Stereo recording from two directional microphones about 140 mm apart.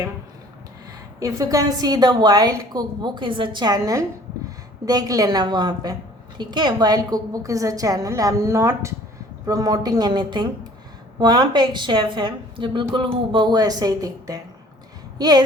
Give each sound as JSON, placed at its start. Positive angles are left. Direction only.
{"t": 1.2, "sound": "a woman's voice", "side_deg": -25}